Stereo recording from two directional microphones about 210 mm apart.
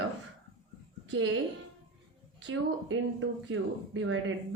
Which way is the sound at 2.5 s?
65° right (ahead or behind).